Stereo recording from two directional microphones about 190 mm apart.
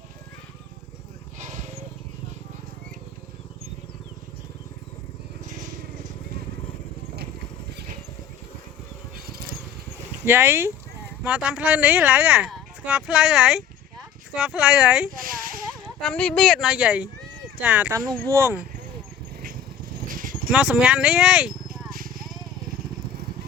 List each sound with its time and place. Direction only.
9.1 s vehicle: 50° right (ahead or behind)
10.2 s speech: 10° right (ahead or behind)
15.1 s a sound: 45° right (ahead or behind)
16.0 s speech: 5° left (ahead or behind)
17.9 s speech: 20° right (ahead or behind)
20.0 s dog: 50° right (ahead or behind)
20.5 s speech: 5° right (ahead or behind)